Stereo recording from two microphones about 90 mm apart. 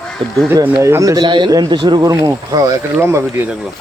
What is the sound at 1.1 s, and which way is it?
Speech, 60° right (ahead or behind).